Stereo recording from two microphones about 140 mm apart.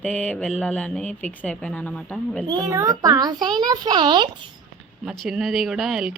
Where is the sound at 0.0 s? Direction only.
5° left (ahead or behind).